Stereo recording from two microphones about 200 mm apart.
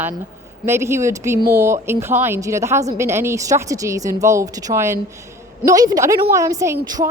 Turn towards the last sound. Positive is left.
turn(degrees=-15)  # may be behind; listen again after turning